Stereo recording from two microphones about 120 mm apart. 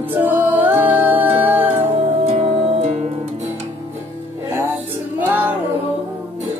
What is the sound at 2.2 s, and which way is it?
Music, 60° right (ahead or behind).